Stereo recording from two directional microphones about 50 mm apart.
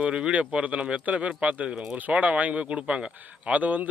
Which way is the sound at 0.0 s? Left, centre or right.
Right.